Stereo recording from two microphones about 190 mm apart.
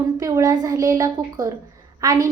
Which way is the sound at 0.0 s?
15° right (ahead or behind).